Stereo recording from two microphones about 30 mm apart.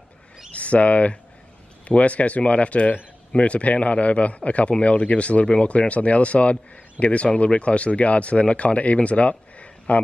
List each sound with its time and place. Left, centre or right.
0.6 s a man's voice: left